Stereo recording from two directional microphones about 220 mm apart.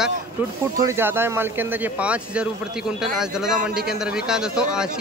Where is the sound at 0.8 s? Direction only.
10° right (ahead or behind).